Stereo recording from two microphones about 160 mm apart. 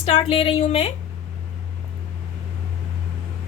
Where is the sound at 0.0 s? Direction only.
35° left (ahead or behind).